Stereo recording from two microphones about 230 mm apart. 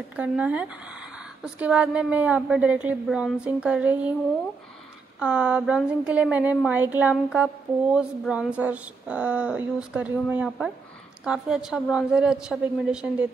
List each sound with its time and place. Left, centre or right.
0.1 s a woman's voice: centre
5.2 s a woman's voice: centre